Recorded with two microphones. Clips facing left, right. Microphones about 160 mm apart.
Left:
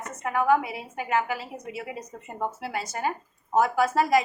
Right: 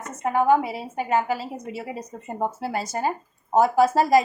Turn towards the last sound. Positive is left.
turn(degrees=-35)  # may be behind; listen again after turning